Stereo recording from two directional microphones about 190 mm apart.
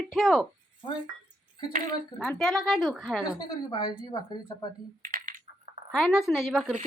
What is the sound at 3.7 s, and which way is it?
Speech, 20° left (ahead or behind).